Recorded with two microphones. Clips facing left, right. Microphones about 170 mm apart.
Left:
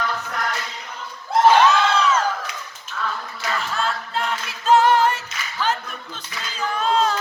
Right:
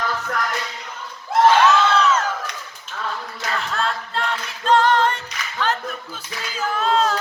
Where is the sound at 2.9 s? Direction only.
50° right (ahead or behind).